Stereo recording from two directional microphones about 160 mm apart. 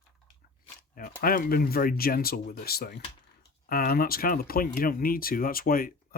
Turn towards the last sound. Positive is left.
turn(degrees=65)  # may be behind; listen again after turning